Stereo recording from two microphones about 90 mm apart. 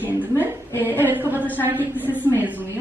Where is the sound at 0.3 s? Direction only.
25° right (ahead or behind).